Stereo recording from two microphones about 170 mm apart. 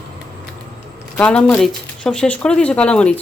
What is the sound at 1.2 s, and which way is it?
Speech, 5° left (ahead or behind).